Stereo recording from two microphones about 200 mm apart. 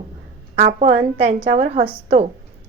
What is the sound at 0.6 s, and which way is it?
Speech, 35° right (ahead or behind).